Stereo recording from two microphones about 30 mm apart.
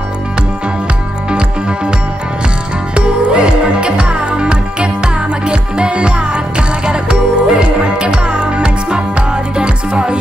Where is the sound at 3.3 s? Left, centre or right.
Right.